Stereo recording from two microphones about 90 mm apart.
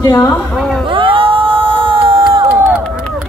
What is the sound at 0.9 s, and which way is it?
Crowd, 75° right (ahead or behind).